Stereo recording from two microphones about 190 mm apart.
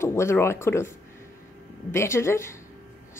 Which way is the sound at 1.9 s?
15° left (ahead or behind).